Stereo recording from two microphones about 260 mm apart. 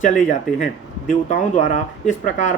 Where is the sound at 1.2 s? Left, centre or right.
Left.